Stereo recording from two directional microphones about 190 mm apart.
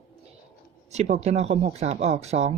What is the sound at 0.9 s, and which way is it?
Speech, 35° right (ahead or behind).